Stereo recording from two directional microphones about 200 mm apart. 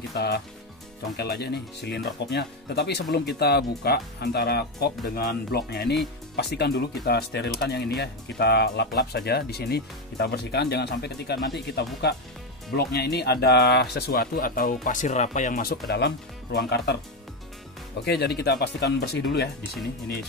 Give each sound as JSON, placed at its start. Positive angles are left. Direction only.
{"t": 0.1, "sound": "speech", "side_deg": 55}
{"t": 18.0, "sound": "speech", "side_deg": 55}